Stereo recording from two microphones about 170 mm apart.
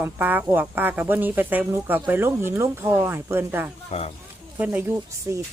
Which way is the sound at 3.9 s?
35° left (ahead or behind).